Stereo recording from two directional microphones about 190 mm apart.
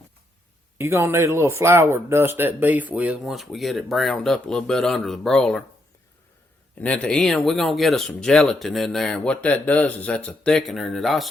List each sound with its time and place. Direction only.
0.8 s speech: 15° right (ahead or behind); by 5.6 s 5° left (ahead or behind)
6.7 s speech: 5° left (ahead or behind)